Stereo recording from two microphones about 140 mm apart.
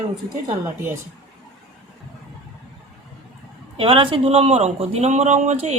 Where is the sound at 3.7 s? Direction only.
40° right (ahead or behind).